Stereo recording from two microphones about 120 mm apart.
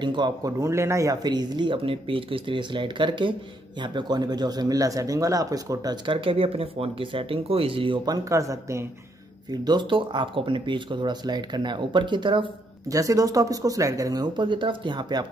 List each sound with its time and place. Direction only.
0.0 s speech: 40° right (ahead or behind)
6.0 s speech: 50° right (ahead or behind); by 8.8 s 25° right (ahead or behind)
9.5 s speech: 40° right (ahead or behind)
12.8 s speech: 30° right (ahead or behind)